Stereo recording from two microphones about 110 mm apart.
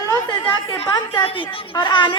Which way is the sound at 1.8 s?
45° left (ahead or behind).